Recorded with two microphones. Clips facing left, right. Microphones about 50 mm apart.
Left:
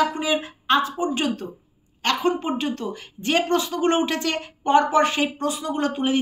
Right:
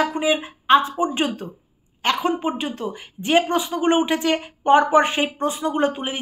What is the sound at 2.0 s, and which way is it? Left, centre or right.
A woman's voice, centre.